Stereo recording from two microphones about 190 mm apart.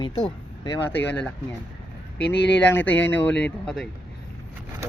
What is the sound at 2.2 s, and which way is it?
Speech, 65° left (ahead or behind).